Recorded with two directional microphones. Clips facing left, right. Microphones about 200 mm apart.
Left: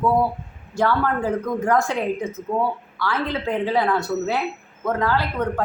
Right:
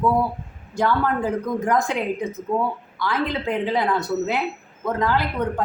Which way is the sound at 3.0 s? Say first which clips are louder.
Right 1 dB; 15° right (ahead or behind).